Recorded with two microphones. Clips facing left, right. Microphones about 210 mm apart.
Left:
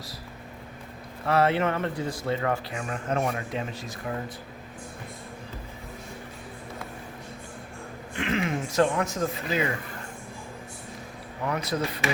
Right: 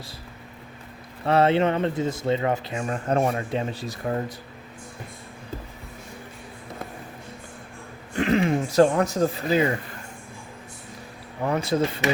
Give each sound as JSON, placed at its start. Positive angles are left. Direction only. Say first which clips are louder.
{"t": 1.2, "sound": "speech", "louder": "right 4 dB", "side_deg": -25}
{"t": 2.8, "sound": "speech", "louder": "right 6 dB", "side_deg": -35}
{"t": 8.1, "sound": "speech", "louder": "right 6 dB", "side_deg": -35}
{"t": 11.4, "sound": "speech", "louder": "right 5 dB", "side_deg": -25}